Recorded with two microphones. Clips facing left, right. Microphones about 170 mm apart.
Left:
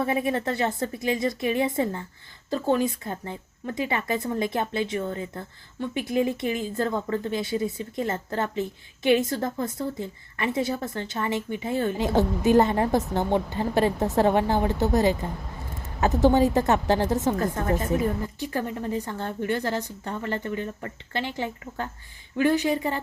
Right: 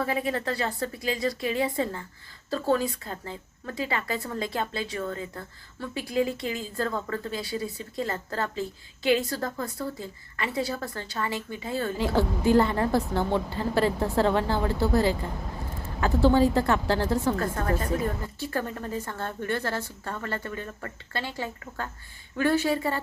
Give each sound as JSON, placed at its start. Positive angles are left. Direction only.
{"t": 0.0, "sound": "a woman's voice", "side_deg": 25}